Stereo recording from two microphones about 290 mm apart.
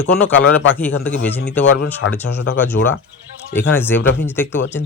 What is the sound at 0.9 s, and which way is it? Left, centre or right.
A man's voice, left.